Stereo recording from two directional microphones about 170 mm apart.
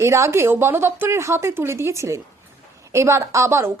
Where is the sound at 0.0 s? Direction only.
15° right (ahead or behind).